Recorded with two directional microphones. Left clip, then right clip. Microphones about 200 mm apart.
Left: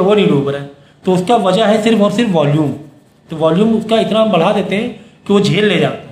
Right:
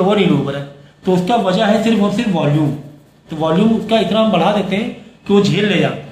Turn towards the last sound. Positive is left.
turn(degrees=45)  # may be behind; listen again after turning